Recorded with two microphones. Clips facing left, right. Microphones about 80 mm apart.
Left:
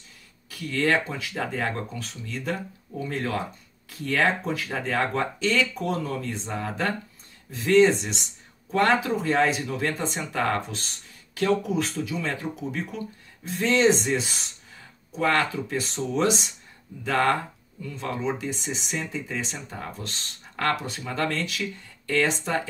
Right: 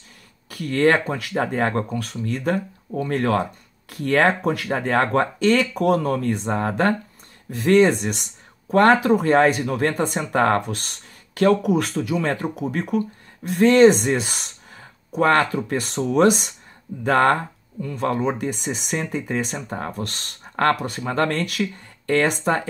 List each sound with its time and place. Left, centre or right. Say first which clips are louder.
0.5 s speech: right 6 dB; right